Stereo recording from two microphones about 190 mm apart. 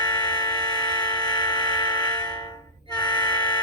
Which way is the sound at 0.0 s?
25° left (ahead or behind).